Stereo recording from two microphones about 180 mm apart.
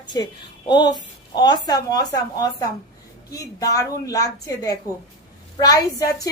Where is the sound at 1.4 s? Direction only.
20° left (ahead or behind).